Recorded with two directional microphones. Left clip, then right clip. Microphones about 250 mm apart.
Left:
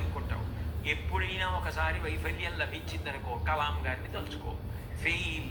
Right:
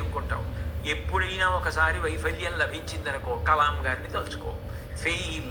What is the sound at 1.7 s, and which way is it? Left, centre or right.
A man's voice, centre.